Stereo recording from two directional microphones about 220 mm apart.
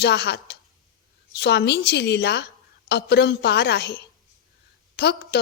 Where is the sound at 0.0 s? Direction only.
50° left (ahead or behind).